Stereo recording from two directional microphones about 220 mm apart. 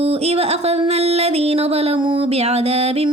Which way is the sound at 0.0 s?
30° right (ahead or behind).